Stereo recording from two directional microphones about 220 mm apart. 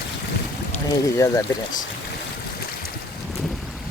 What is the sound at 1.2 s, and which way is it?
Speech, 15° left (ahead or behind).